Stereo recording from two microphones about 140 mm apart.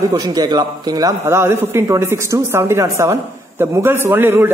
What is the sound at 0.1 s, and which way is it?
Speech, 30° right (ahead or behind).